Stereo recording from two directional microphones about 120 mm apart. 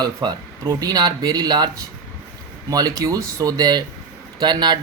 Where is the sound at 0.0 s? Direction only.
35° right (ahead or behind).